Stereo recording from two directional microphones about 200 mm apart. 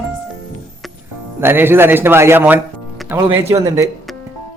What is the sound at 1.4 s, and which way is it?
Speech, 10° right (ahead or behind).